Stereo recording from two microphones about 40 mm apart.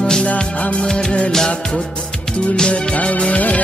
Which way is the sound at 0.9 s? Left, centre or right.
Centre.